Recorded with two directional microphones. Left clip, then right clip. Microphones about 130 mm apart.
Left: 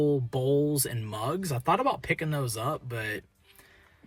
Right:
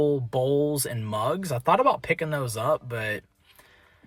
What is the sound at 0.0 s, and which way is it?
Speech, 35° right (ahead or behind).